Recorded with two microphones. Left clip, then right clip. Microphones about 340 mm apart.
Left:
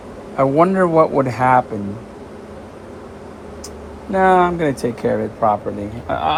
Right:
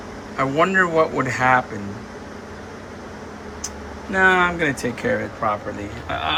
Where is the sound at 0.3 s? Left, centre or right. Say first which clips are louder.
Left 3 dB; centre.